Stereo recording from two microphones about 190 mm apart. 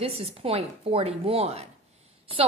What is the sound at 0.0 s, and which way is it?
A woman's voice, 30° right (ahead or behind).